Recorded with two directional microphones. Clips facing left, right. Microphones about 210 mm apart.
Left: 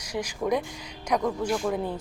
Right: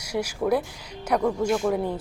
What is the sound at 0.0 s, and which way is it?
Speech, 10° right (ahead or behind).